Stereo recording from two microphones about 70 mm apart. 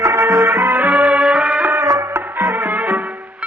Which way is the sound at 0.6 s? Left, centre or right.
Right.